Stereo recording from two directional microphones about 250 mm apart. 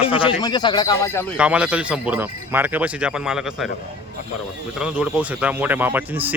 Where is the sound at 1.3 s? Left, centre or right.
Centre.